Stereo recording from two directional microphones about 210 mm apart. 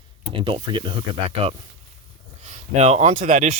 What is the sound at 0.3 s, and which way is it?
Speech, 25° right (ahead or behind).